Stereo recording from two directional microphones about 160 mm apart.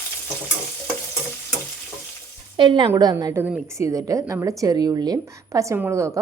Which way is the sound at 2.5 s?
30° right (ahead or behind).